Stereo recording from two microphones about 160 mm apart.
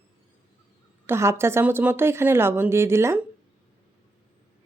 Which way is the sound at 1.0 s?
15° right (ahead or behind).